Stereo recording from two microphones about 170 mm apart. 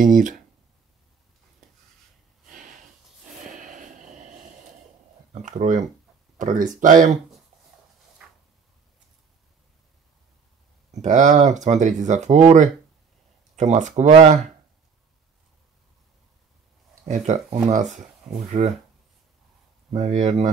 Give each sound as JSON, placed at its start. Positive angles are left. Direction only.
{"t": 0.0, "sound": "speech", "side_deg": -50}
{"t": 3.5, "sound": "a sound", "side_deg": -50}
{"t": 5.3, "sound": "speech", "side_deg": -45}
{"t": 8.2, "sound": "drawer open or close", "side_deg": -5}
{"t": 10.9, "sound": "speech", "side_deg": -45}
{"t": 17.1, "sound": "speech", "side_deg": -45}
{"t": 19.9, "sound": "speech", "side_deg": -40}